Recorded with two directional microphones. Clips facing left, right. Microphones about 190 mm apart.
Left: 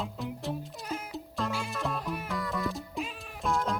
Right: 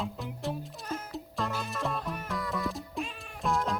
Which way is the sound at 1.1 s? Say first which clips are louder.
Left 1 dB; centre (ahead or behind).